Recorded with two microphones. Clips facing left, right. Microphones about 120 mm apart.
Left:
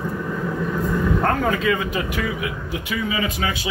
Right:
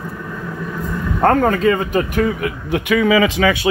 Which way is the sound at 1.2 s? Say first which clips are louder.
Right 6 dB; 50° right (ahead or behind).